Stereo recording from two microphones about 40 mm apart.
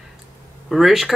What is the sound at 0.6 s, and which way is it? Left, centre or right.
Speech, centre.